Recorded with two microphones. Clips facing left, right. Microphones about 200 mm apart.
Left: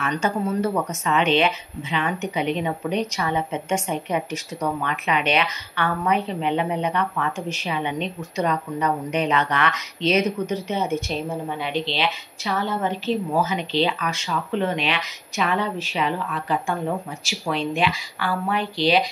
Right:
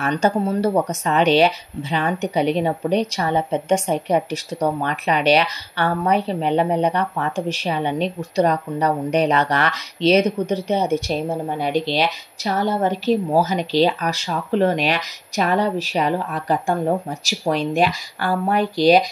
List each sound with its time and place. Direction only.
0.0 s a woman's voice: 35° right (ahead or behind)